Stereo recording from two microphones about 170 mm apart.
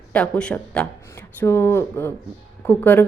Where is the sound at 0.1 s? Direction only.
5° left (ahead or behind).